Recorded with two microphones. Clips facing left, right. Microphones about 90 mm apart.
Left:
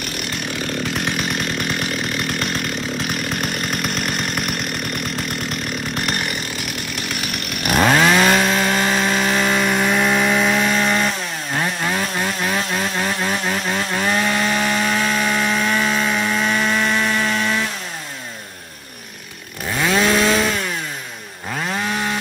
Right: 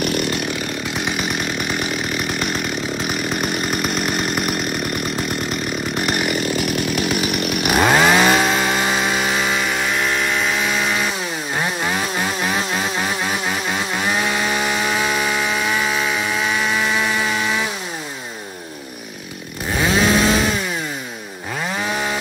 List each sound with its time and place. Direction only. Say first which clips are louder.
0.9 s chainsaw: even; 5° right (ahead or behind)
5.9 s chainsaw: right 4 dB; 5° right (ahead or behind)
7.4 s chainsaw: left 1 dB; 5° right (ahead or behind)
19.8 s chainsaw: even; 5° right (ahead or behind)
21.6 s chainsaw: even; centre (ahead or behind)